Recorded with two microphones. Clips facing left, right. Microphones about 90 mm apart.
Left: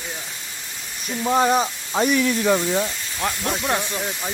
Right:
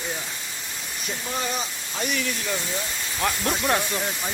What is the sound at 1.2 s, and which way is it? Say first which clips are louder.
Speech: left 12 dB; 50° left (ahead or behind).